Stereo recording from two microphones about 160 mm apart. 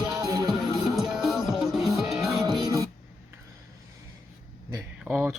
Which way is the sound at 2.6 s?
20° right (ahead or behind).